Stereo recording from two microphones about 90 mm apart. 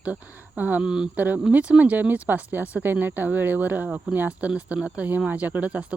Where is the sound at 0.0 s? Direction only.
15° right (ahead or behind).